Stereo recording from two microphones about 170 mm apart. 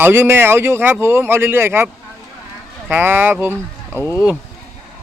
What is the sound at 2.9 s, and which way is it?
A man's voice, 15° right (ahead or behind).